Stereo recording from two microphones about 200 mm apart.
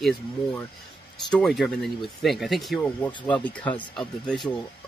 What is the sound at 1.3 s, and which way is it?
Speech, centre (ahead or behind).